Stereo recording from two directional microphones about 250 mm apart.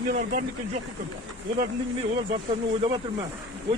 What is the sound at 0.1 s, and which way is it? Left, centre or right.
Speech, right.